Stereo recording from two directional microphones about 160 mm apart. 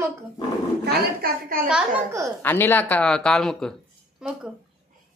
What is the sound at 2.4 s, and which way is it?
Speech, 15° left (ahead or behind).